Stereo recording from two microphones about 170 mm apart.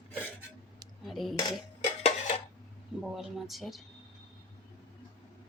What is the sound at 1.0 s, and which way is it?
Speech, centre (ahead or behind).